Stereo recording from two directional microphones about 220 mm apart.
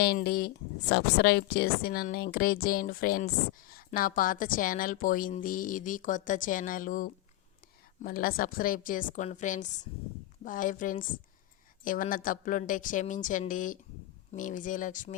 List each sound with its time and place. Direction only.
0.0 s a woman's voice: 45° left (ahead or behind)